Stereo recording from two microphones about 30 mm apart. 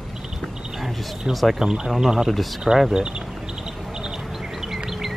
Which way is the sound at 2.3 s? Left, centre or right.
Centre.